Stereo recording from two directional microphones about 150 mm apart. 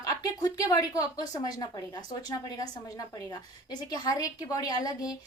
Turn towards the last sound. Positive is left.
turn(degrees=25)  # may be behind; listen again after turning